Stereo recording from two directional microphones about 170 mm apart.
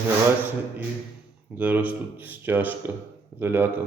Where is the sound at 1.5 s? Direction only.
10° right (ahead or behind).